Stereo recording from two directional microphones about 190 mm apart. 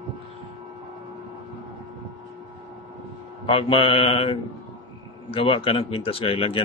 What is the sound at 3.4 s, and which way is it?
Speech, 25° left (ahead or behind).